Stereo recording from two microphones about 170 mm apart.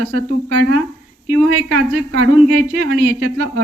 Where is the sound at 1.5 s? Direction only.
60° right (ahead or behind).